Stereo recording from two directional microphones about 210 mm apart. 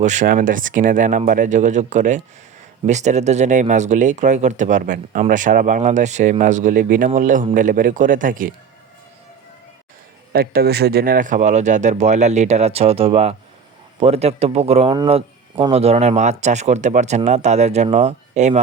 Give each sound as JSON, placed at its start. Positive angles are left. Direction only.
{"t": 0.0, "sound": "a man's voice", "side_deg": -35}
{"t": 10.3, "sound": "a man's voice", "side_deg": -45}